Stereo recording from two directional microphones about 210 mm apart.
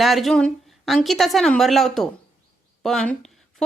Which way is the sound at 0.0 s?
Centre (ahead or behind).